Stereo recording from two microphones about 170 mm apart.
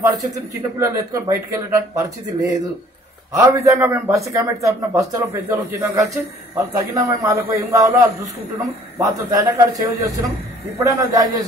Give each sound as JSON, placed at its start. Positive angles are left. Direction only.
{"t": 0.0, "sound": "a man's voice", "side_deg": -20}
{"t": 3.3, "sound": "a man's voice", "side_deg": -15}